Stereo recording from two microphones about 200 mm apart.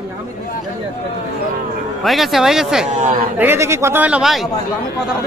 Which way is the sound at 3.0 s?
40° right (ahead or behind).